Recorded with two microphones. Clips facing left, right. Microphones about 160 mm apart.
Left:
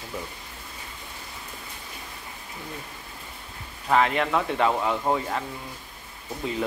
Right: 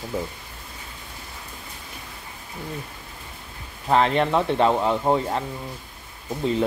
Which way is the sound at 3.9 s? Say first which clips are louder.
Right 3 dB; 30° right (ahead or behind).